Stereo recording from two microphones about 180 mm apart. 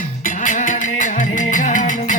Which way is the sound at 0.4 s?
45° left (ahead or behind).